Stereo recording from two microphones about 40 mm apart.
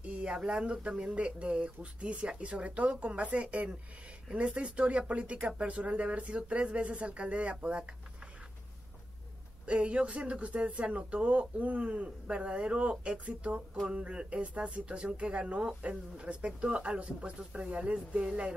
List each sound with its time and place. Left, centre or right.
0.0 s a sound: right
0.5 s speech: right
9.7 s speech: right